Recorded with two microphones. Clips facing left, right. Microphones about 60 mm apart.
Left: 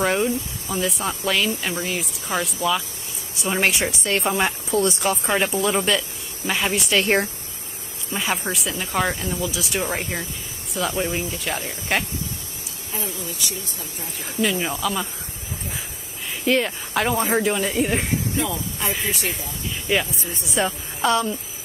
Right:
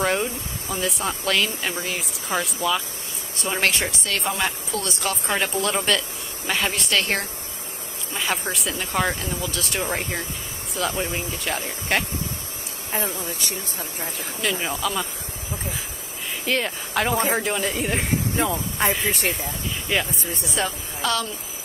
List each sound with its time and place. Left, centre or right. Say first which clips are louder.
0.0 s speech: left 2 dB; centre
4.0 s a woman's voice: left 6 dB; left
5.3 s speech: left 2 dB; centre
8.1 s speech: left 1 dB; centre
12.9 s speech: right 3 dB; right
14.4 s speech: left 3 dB; centre
16.4 s speech: left 4 dB; centre
18.3 s speech: right 1 dB; right
19.9 s a woman's voice: left 2 dB; centre